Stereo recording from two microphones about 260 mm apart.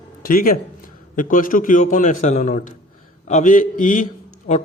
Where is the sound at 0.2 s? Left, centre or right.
Left.